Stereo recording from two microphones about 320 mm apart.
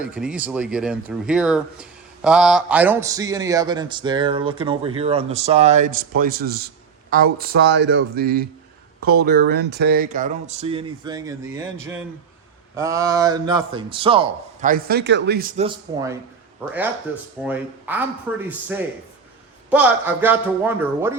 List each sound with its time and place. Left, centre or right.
0.0 s a man's voice: centre
17.4 s a man's voice: centre